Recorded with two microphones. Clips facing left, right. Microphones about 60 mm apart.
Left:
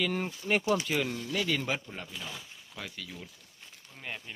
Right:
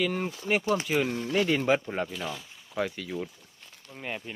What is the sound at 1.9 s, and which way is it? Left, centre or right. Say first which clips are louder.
Speech: right 11 dB; right.